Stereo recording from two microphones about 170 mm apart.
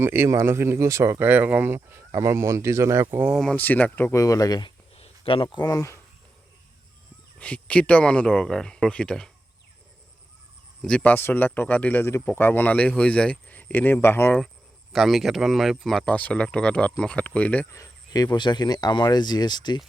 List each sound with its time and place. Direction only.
0.0 s speech: 15° right (ahead or behind)
3.2 s speech: centre (ahead or behind); by 4.7 s 25° left (ahead or behind)
4.9 s speech: 35° left (ahead or behind); by 6.0 s 20° left (ahead or behind)
7.3 s speech: 5° left (ahead or behind)
10.8 s speech: 10° left (ahead or behind)
14.9 s speech: centre (ahead or behind); by 19.8 s 25° left (ahead or behind)